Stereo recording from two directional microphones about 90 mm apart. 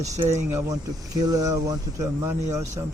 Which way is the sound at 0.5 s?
40° right (ahead or behind).